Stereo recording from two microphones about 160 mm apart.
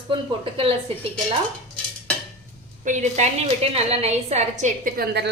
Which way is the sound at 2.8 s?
50° right (ahead or behind).